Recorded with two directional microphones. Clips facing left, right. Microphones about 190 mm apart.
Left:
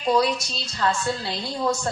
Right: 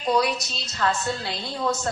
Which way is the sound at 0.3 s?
20° right (ahead or behind).